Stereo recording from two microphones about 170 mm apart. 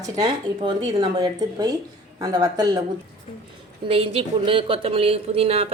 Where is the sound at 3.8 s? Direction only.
35° right (ahead or behind).